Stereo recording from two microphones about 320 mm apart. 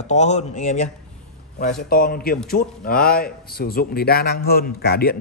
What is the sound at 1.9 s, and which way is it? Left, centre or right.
A man's voice, left.